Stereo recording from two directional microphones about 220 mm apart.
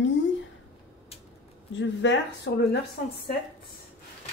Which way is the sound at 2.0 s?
55° left (ahead or behind).